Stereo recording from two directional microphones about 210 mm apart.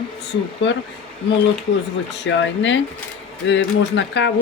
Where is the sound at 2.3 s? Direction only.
60° left (ahead or behind).